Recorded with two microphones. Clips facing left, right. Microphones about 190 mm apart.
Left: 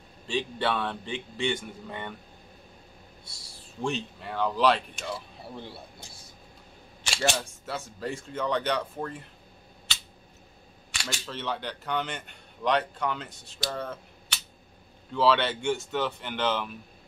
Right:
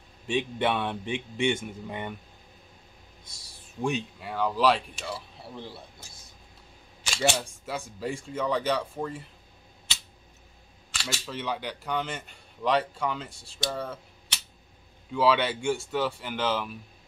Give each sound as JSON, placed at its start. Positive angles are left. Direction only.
{"t": 0.3, "sound": "speech", "side_deg": -20}
{"t": 3.8, "sound": "speech", "side_deg": -10}
{"t": 7.2, "sound": "speech", "side_deg": -10}
{"t": 10.9, "sound": "speech", "side_deg": -5}
{"t": 15.1, "sound": "speech", "side_deg": -10}